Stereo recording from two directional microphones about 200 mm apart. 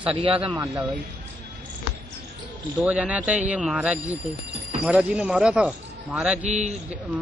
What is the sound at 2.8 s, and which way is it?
A man's voice, 5° right (ahead or behind).